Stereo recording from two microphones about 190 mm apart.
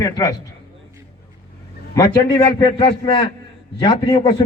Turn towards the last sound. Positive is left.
turn(degrees=25)  # may be behind; listen again after turning